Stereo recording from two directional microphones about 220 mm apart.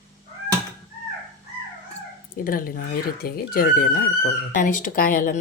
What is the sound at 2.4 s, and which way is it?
Speech, 40° left (ahead or behind).